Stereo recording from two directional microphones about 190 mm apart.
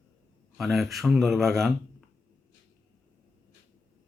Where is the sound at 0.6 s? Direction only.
Centre (ahead or behind).